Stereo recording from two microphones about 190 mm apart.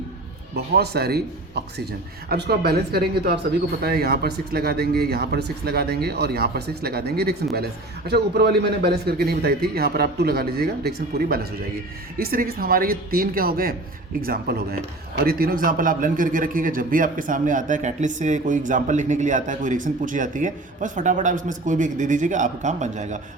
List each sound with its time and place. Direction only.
0.5 s a man's voice: 55° right (ahead or behind); by 23.2 s 40° right (ahead or behind)